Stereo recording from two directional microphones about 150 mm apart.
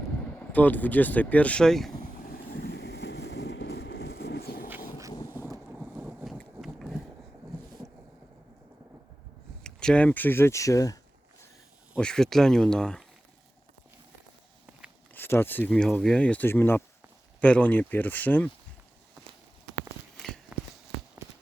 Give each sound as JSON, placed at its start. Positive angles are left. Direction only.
{"t": 0.3, "sound": "speech", "side_deg": 10}
{"t": 2.0, "sound": "vehicle", "side_deg": 85}
{"t": 5.8, "sound": "boat", "side_deg": -5}
{"t": 6.7, "sound": "a sound", "side_deg": 0}
{"t": 9.6, "sound": "speech", "side_deg": 5}
{"t": 11.9, "sound": "speech", "side_deg": 5}
{"t": 15.1, "sound": "speech", "side_deg": 15}
{"t": 20.1, "sound": "walk", "side_deg": 5}